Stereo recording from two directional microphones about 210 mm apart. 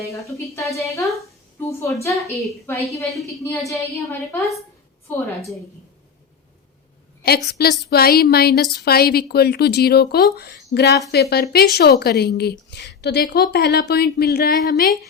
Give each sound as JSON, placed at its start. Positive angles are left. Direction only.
{"t": 0.0, "sound": "a woman's voice", "side_deg": 15}
{"t": 3.6, "sound": "a woman's voice", "side_deg": 0}
{"t": 7.2, "sound": "a woman's voice", "side_deg": 50}